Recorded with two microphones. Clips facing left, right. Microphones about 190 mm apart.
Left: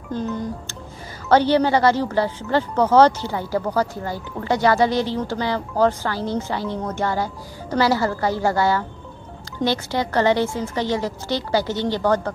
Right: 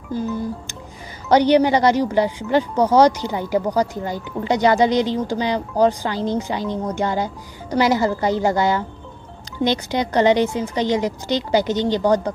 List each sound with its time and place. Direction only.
0.1 s a woman's voice: 5° right (ahead or behind)